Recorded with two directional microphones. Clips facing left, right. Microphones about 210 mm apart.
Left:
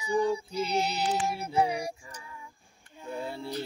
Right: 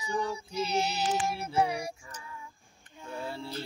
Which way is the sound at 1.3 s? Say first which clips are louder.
Left 1 dB; 15° left (ahead or behind).